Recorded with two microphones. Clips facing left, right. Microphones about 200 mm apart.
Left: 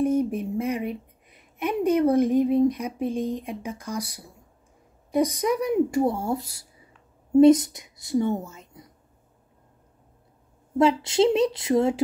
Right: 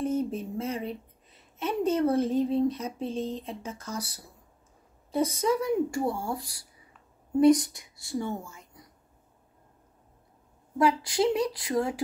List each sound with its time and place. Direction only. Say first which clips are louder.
0.0 s a woman's voice: left 6 dB; 15° left (ahead or behind)
10.8 s a woman's voice: left 5 dB; 25° left (ahead or behind)